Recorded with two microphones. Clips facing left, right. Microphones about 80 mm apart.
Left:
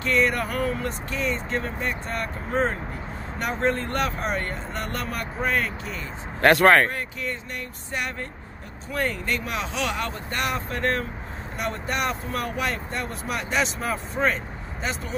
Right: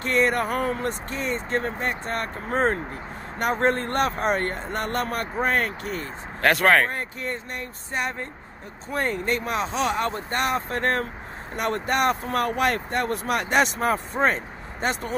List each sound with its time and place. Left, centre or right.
0.0 s speech: right
6.4 s speech: centre
6.9 s speech: right
8.9 s speech: right
11.5 s speech: right